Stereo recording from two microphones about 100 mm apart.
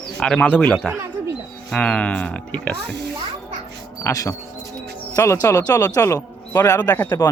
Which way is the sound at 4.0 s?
30° left (ahead or behind).